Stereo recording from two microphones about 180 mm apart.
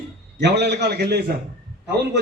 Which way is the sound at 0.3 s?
70° right (ahead or behind).